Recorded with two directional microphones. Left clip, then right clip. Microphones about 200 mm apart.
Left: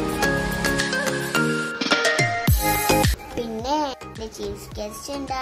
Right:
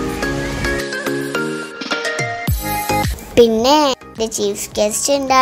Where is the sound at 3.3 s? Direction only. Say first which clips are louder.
Right 14 dB; 40° right (ahead or behind).